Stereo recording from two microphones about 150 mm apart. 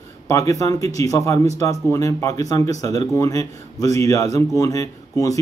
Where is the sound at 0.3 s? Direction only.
20° left (ahead or behind).